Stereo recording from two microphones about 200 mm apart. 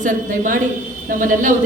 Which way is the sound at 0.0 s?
40° right (ahead or behind).